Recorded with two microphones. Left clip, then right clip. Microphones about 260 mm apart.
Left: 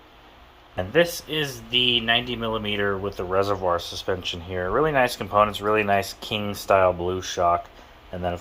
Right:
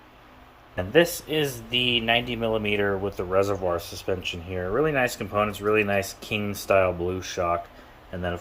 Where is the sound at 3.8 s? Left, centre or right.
Right.